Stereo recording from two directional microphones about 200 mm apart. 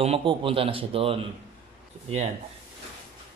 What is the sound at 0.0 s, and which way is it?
Speech, 30° right (ahead or behind).